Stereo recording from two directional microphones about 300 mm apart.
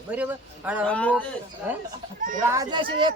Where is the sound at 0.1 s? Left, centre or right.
Centre.